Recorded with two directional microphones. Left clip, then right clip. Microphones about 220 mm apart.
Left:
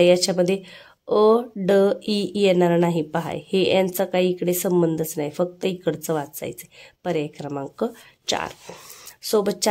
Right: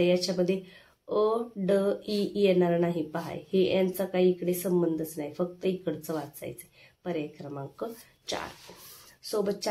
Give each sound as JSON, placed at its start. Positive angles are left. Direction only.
{"t": 0.0, "sound": "speech", "side_deg": 50}